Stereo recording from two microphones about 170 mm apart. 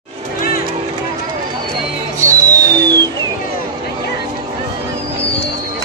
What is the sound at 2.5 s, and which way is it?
Music, 20° right (ahead or behind).